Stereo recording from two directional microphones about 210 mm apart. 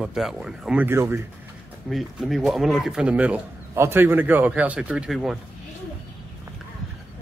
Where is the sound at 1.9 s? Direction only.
Centre (ahead or behind).